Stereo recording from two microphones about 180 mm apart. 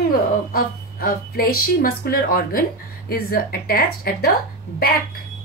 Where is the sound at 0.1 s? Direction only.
55° left (ahead or behind).